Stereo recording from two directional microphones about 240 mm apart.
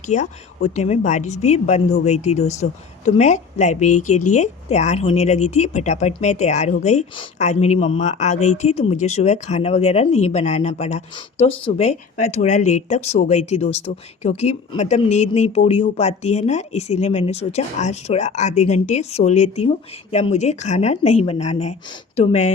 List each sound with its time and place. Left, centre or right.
0.1 s a woman's voice: left